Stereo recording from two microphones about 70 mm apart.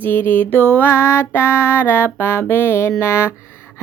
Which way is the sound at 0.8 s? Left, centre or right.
Left.